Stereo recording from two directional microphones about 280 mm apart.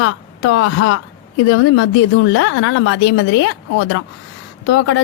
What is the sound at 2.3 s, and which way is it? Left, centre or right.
A woman's voice, left.